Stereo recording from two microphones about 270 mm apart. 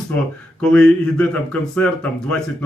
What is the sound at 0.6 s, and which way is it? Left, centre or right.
Speech, centre.